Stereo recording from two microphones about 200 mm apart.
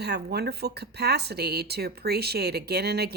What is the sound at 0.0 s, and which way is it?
Speech, 55° right (ahead or behind).